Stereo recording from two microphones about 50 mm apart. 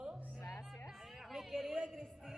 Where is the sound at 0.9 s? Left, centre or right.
Centre.